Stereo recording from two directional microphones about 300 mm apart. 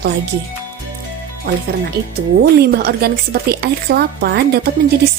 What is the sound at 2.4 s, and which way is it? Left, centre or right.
Speech, right.